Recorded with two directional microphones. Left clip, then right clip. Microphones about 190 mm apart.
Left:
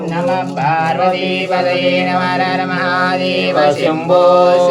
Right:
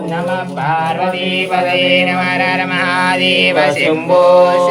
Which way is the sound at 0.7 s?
30° left (ahead or behind).